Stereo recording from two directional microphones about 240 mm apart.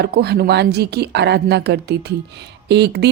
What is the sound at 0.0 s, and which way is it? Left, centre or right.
Speech, right.